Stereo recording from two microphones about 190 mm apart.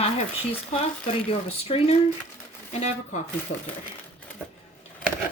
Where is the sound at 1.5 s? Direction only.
35° left (ahead or behind).